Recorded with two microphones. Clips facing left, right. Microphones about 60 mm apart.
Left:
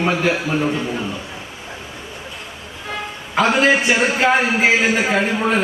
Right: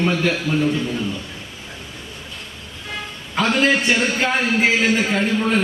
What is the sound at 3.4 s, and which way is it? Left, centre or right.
A man's voice, centre.